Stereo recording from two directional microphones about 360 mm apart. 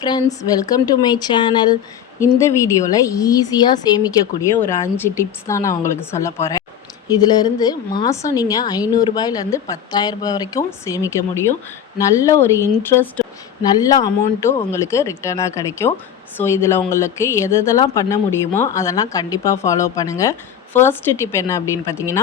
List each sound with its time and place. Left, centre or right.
0.0 s a woman's voice: centre